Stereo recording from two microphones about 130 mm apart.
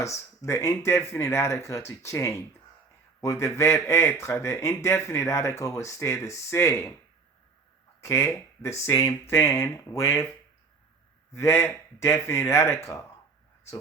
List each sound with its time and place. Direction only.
0.0 s speech: 20° left (ahead or behind)
8.0 s speech: 20° left (ahead or behind)
11.3 s speech: 20° left (ahead or behind)